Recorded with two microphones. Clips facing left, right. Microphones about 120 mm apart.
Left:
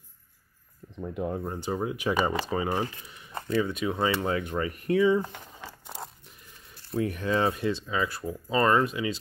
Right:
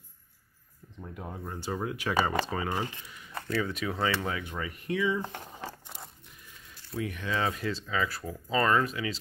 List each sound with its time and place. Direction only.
0.9 s speech: 70° left (ahead or behind)
1.4 s speech: 20° left (ahead or behind)
4.3 s speech: 45° left (ahead or behind)
5.2 s a sound: 30° right (ahead or behind)
7.0 s speech: 40° left (ahead or behind)
7.4 s speech: 25° left (ahead or behind)